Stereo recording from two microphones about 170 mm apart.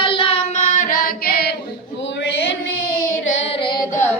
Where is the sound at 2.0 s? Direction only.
90° left.